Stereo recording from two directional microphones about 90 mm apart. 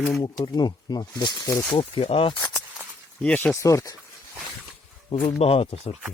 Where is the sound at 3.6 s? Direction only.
35° left (ahead or behind).